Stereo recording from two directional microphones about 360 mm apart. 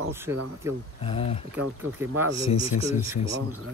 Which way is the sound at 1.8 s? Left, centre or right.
Centre.